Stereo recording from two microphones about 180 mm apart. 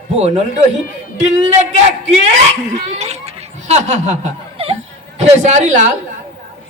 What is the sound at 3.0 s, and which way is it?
Laughter, 35° right (ahead or behind).